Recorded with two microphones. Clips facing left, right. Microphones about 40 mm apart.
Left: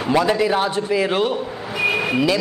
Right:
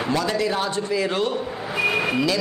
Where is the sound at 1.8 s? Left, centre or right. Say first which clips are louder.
Left 2 dB; centre.